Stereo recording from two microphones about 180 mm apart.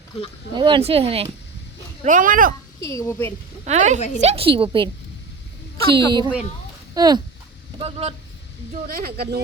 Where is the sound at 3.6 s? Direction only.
40° right (ahead or behind).